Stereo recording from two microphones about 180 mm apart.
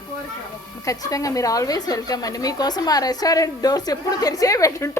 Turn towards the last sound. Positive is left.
turn(degrees=15)  # may be behind; listen again after turning